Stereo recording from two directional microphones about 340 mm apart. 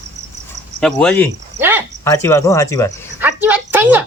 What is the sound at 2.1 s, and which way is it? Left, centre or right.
Speech, centre.